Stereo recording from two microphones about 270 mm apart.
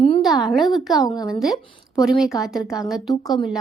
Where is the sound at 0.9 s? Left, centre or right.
Centre.